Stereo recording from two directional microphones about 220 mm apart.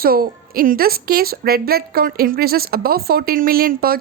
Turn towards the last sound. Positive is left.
turn(degrees=-45)  # may be behind; listen again after turning